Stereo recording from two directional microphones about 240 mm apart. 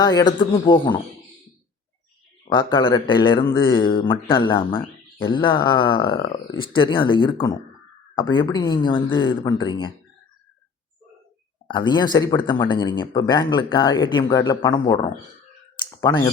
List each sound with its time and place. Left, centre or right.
0.0 s speech: centre
2.4 s speech: centre
11.7 s speech: centre